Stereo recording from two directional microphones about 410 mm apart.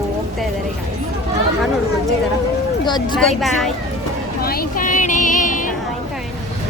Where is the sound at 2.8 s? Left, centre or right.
Centre.